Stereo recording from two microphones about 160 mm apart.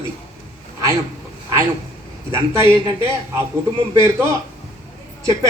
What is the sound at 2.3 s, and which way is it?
Speech, 15° right (ahead or behind).